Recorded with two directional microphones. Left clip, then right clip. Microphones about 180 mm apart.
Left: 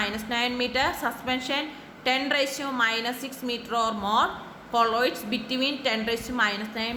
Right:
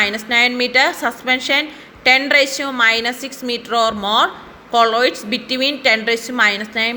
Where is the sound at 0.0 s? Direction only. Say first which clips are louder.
Right 12 dB; 30° right (ahead or behind).